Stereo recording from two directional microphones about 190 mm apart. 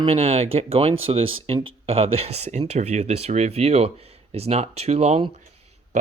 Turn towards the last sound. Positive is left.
turn(degrees=-35)  # may be behind; listen again after turning